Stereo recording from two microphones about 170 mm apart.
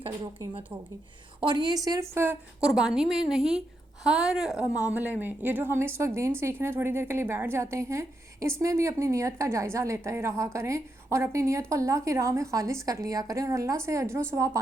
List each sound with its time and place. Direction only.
1.4 s a woman's voice: 25° right (ahead or behind)
2.6 s a woman's voice: 5° right (ahead or behind); by 14.6 s 20° right (ahead or behind)